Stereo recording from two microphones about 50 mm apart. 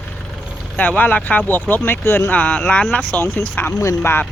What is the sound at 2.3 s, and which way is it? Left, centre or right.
Speech, left.